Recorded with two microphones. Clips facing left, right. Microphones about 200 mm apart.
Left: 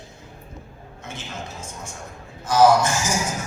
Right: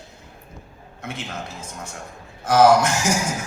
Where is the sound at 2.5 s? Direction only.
60° right (ahead or behind).